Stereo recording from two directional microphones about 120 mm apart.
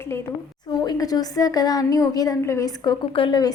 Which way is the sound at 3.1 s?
45° left (ahead or behind).